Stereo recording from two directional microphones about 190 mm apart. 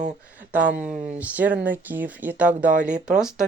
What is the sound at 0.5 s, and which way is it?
Speech, 5° right (ahead or behind).